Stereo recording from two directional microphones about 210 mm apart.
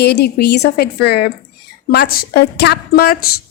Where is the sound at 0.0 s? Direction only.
50° left (ahead or behind).